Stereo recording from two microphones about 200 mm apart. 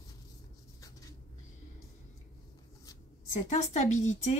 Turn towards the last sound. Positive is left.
turn(degrees=35)  # may be behind; listen again after turning